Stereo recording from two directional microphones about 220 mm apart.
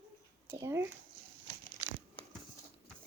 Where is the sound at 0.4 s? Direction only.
10° right (ahead or behind).